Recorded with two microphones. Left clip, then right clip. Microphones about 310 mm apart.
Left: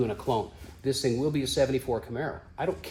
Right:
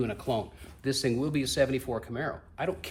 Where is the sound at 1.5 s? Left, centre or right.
Centre.